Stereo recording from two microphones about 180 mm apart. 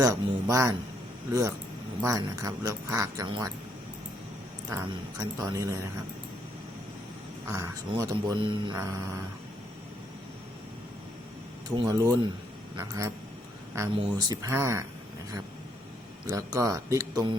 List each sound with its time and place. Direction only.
0.0 s speech: 15° right (ahead or behind)
5.4 s speech: 20° right (ahead or behind)
7.4 s speech: 15° right (ahead or behind)
11.8 s speech: 20° right (ahead or behind)
16.3 s speech: 15° right (ahead or behind)